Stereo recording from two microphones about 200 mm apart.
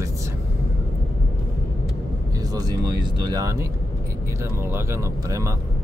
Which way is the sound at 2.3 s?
20° right (ahead or behind).